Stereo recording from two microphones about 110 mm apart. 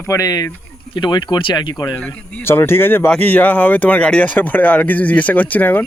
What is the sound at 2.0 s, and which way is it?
Speech, 20° left (ahead or behind).